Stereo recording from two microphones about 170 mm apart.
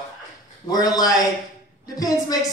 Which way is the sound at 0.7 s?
20° left (ahead or behind).